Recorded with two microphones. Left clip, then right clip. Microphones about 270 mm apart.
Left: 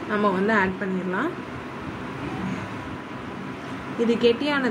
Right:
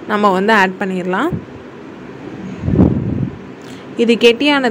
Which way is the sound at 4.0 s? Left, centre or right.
Right.